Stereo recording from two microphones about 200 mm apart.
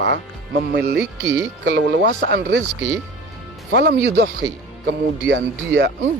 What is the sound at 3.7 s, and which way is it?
Speech, 60° right (ahead or behind).